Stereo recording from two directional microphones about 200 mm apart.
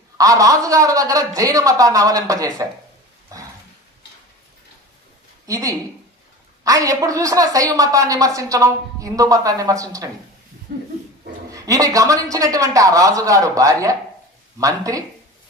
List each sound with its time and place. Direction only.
0.2 s a woman's voice: 15° right (ahead or behind)
3.3 s dog: 15° right (ahead or behind)
5.5 s a woman's voice: 15° right (ahead or behind)
10.7 s pig: 45° right (ahead or behind)
11.5 s a woman's voice: 15° right (ahead or behind)